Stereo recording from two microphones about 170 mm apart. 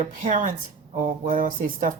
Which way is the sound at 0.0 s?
50° right (ahead or behind).